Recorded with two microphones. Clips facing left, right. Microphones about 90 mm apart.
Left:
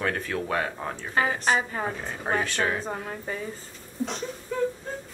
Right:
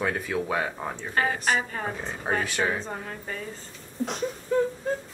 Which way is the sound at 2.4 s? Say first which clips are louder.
Even; 10° right (ahead or behind).